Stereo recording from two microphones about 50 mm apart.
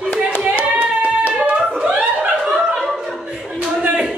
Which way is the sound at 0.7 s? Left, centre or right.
Right.